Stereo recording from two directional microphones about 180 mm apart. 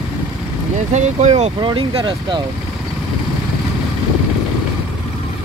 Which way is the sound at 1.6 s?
25° right (ahead or behind).